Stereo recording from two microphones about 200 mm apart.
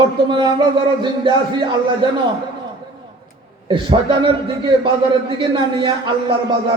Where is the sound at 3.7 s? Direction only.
25° right (ahead or behind).